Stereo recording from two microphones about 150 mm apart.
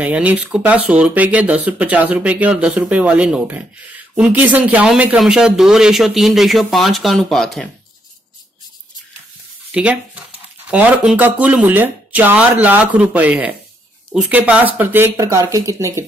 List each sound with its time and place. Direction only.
0.0 s speech: 10° right (ahead or behind)
9.7 s speech: 5° right (ahead or behind)